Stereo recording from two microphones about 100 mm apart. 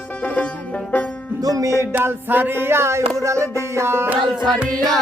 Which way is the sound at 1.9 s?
20° right (ahead or behind).